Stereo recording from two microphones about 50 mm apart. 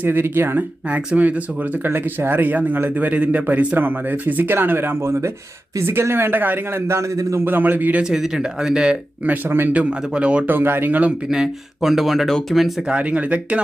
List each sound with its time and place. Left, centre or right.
0.0 s speech: right
0.9 s speech: right
1.8 s a man's voice: right
5.0 s a man's voice: right
5.8 s speech: right
6.8 s a man's voice: right
7.4 s a man's voice: right
8.1 s speech: centre
9.2 s a man's voice: right
10.4 s a man's voice: right
11.3 s speech: centre
12.9 s speech: right